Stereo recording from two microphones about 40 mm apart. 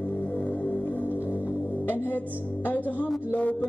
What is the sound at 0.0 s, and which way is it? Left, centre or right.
Music, left.